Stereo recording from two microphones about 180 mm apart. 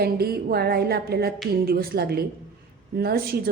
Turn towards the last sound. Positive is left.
turn(degrees=-60)  # may be behind; listen again after turning